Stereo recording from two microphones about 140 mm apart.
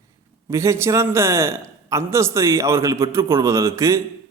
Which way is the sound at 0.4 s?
20° right (ahead or behind).